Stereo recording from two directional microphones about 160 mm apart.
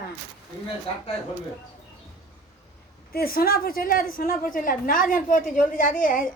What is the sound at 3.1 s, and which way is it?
A woman's voice, 65° left (ahead or behind).